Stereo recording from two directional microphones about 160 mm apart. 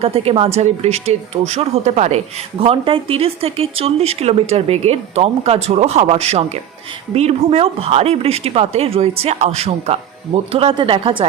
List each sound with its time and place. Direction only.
0.0 s speech: 35° right (ahead or behind)